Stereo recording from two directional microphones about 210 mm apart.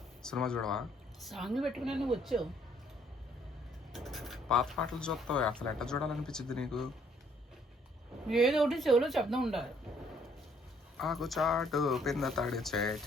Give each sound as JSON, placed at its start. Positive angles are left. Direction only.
{"t": 0.2, "sound": "speech", "side_deg": 5}
{"t": 3.9, "sound": "speech", "side_deg": 0}
{"t": 8.3, "sound": "speech", "side_deg": 0}
{"t": 10.9, "sound": "speech", "side_deg": 0}